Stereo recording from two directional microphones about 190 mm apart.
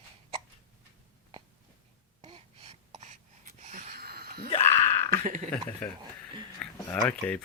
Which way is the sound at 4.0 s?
55° right (ahead or behind).